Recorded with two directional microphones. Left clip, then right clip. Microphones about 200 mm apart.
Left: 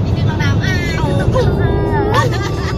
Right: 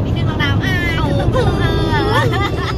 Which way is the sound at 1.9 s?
20° right (ahead or behind).